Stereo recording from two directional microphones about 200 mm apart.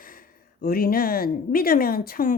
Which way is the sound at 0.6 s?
45° left (ahead or behind).